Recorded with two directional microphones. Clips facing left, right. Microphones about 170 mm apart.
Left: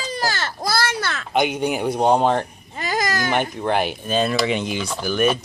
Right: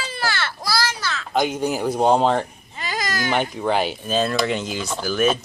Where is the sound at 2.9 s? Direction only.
45° left (ahead or behind).